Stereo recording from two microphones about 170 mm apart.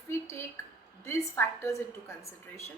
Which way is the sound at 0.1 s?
15° left (ahead or behind).